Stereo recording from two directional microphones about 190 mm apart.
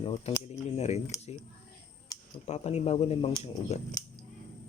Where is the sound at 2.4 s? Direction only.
35° left (ahead or behind).